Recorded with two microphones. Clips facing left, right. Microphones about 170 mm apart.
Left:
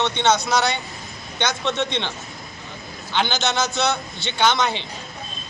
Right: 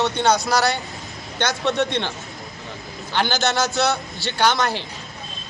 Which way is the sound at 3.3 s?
20° left (ahead or behind).